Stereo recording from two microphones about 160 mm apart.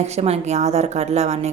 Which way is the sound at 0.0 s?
45° right (ahead or behind).